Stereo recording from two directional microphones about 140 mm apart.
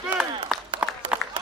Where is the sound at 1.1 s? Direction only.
5° right (ahead or behind).